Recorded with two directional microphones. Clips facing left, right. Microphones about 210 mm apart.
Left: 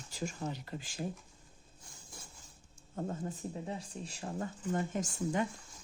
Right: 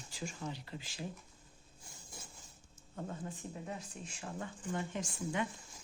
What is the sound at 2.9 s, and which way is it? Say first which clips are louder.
Speech: left 5 dB; 40° left (ahead or behind).